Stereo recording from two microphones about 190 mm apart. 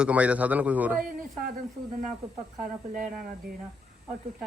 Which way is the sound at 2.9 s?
45° right (ahead or behind).